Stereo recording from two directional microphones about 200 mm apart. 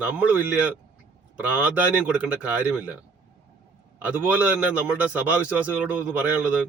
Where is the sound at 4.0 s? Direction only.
5° right (ahead or behind).